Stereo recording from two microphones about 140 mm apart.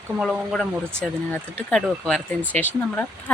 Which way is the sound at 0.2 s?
Centre (ahead or behind).